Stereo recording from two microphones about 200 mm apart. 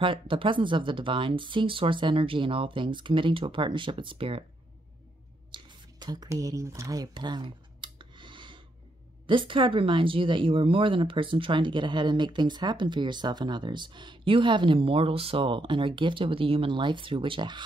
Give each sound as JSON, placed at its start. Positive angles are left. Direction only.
{"t": 0.0, "sound": "speech", "side_deg": -25}
{"t": 5.5, "sound": "a sound", "side_deg": -20}
{"t": 9.3, "sound": "speech", "side_deg": -25}